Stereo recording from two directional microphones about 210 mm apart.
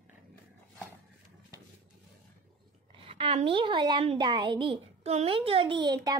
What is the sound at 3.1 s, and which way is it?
A woman's voice, 25° right (ahead or behind).